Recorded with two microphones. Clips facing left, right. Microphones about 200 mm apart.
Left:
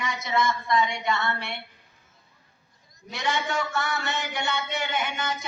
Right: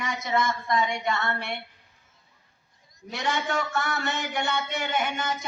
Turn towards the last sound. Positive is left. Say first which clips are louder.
# right 1 dB
turn(degrees=-45)  # may be behind; listen again after turning